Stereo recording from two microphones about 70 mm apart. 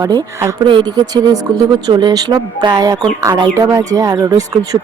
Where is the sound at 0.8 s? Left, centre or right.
Right.